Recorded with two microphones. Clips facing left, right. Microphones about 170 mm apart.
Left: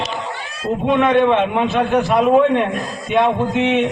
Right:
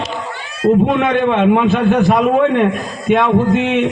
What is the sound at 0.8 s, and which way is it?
A man's voice, 55° right (ahead or behind).